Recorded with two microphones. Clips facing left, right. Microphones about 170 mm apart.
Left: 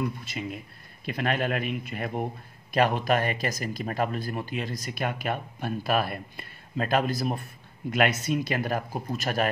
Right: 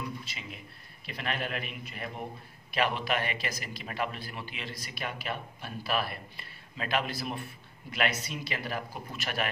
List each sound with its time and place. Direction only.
0.0 s speech: 50° left (ahead or behind)